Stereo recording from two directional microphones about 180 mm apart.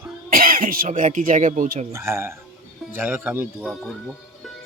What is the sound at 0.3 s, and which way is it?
Speech, 50° right (ahead or behind).